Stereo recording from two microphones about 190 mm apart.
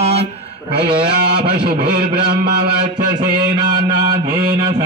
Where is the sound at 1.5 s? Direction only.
50° right (ahead or behind).